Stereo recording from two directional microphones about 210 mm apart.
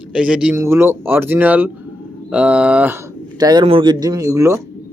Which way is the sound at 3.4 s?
20° right (ahead or behind).